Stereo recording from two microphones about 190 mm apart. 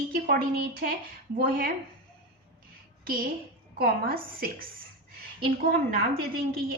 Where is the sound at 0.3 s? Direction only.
50° right (ahead or behind).